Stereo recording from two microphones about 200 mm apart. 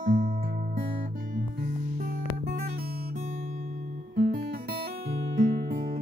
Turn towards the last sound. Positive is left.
turn(degrees=-45)  # may be behind; listen again after turning